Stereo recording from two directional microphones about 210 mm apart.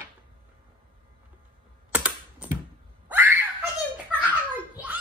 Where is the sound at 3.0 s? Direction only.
10° right (ahead or behind).